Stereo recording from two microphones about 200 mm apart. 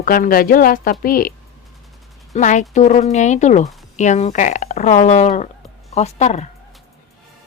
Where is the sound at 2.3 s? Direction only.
35° left (ahead or behind).